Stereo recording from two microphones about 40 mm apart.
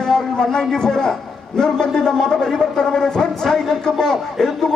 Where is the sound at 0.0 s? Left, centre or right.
Centre.